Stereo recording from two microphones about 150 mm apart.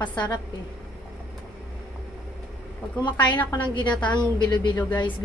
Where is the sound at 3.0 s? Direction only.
30° left (ahead or behind).